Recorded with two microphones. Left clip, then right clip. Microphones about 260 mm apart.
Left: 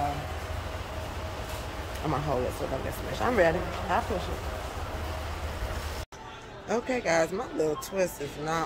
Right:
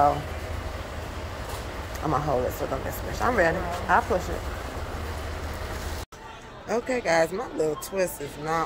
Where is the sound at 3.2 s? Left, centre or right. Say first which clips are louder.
Right 2 dB; centre.